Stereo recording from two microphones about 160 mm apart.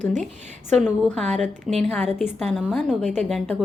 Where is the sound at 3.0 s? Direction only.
45° right (ahead or behind).